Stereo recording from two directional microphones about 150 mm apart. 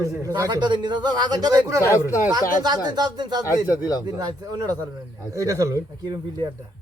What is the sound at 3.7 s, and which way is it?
Speech, 25° left (ahead or behind).